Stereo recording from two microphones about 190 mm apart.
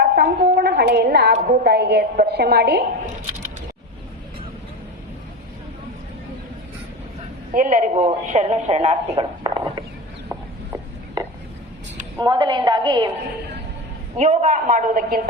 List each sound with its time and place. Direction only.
0.0 s a woman's voice: 55° right (ahead or behind)
7.5 s speech: 40° right (ahead or behind)
10.2 s a sound: 10° right (ahead or behind)
12.1 s a woman's voice: 20° right (ahead or behind)
14.2 s speech: 35° right (ahead or behind)